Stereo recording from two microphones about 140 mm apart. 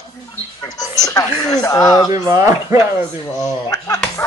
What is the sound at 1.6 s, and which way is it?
Speech, 25° left (ahead or behind).